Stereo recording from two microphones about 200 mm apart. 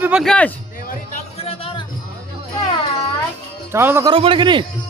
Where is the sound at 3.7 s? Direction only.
10° right (ahead or behind).